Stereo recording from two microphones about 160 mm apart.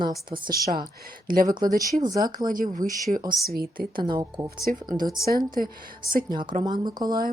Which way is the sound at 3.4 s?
70° right (ahead or behind).